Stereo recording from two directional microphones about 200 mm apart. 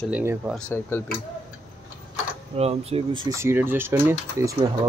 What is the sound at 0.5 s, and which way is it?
Speech, 10° left (ahead or behind).